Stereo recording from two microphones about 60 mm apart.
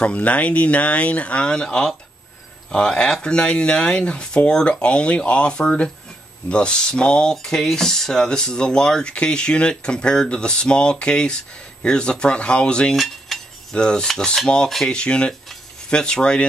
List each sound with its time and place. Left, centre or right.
0.0 s speech: left
12.9 s cutlery: centre
15.0 s speech: centre